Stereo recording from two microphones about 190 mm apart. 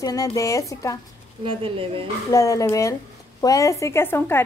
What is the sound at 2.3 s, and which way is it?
A woman's voice, 15° left (ahead or behind).